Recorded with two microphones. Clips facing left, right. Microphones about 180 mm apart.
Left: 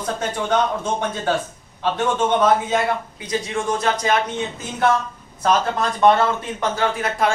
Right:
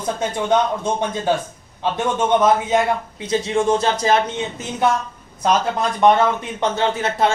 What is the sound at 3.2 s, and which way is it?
Speech, 25° right (ahead or behind).